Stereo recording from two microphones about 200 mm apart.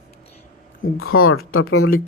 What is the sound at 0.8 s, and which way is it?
Speech, 90° left.